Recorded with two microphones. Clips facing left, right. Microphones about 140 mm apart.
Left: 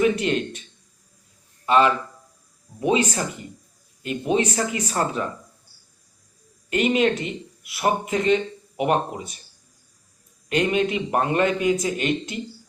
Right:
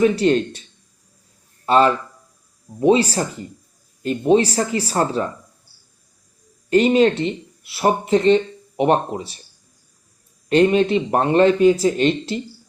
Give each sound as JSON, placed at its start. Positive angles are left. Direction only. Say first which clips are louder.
{"t": 0.0, "sound": "speech", "louder": "right 5 dB", "side_deg": -35}
{"t": 1.6, "sound": "a man's voice", "louder": "right 3 dB", "side_deg": -35}
{"t": 6.7, "sound": "speech", "louder": "right 6 dB", "side_deg": -35}
{"t": 10.5, "sound": "speech", "louder": "right 7 dB", "side_deg": -30}